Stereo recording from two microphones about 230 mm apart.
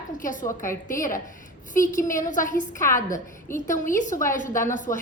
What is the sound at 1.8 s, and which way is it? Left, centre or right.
Speech, centre.